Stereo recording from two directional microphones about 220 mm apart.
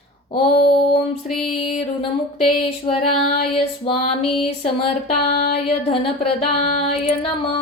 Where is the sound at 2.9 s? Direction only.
25° left (ahead or behind).